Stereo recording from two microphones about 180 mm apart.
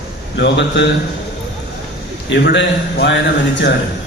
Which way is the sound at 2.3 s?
80° left.